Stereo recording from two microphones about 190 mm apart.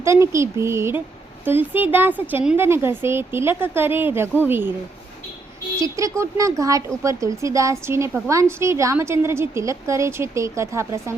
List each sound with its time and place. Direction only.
0.0 s speech: 15° right (ahead or behind)
5.8 s speech: 15° right (ahead or behind)